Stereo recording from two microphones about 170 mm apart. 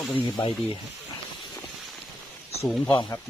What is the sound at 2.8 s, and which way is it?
Speech, 25° left (ahead or behind).